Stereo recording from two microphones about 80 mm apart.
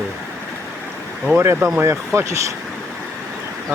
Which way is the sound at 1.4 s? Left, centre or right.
Right.